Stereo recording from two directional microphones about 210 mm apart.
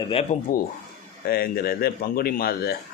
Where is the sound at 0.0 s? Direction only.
30° left (ahead or behind).